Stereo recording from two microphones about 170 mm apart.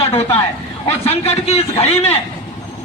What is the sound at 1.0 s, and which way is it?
A man's voice, 40° left (ahead or behind).